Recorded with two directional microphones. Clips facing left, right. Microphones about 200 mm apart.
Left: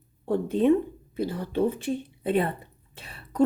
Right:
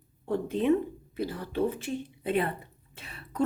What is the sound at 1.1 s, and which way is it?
A woman's voice, 25° left (ahead or behind).